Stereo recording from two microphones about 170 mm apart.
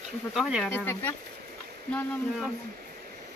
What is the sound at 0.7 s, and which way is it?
Speech, 10° left (ahead or behind).